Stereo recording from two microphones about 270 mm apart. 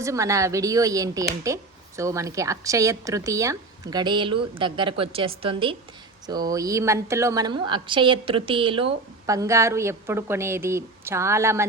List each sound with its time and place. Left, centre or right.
0.0 s a woman's voice: centre